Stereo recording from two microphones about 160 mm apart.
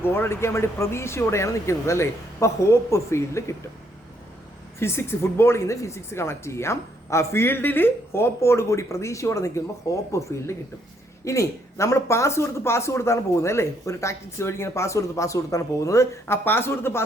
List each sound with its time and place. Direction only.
0.0 s speech: 15° left (ahead or behind)
4.8 s speech: 15° left (ahead or behind)